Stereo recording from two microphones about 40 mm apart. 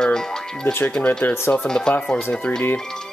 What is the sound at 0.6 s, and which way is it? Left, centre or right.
Speech, left.